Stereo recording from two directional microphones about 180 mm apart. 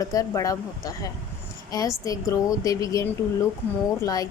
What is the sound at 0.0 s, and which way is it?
A woman's voice, 20° left (ahead or behind).